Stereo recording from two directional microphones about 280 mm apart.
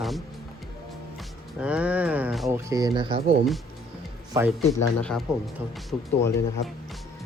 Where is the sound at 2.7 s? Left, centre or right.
Centre.